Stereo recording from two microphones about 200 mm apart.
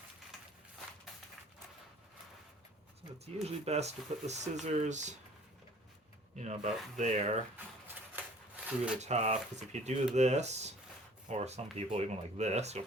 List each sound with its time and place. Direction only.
3.4 s speech: 35° right (ahead or behind)
6.3 s speech: 35° right (ahead or behind)
7.5 s a sound: 10° right (ahead or behind)
9.0 s speech: 35° right (ahead or behind)